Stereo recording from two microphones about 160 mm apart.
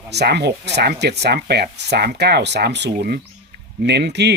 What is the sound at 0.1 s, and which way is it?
Speech, 90° right.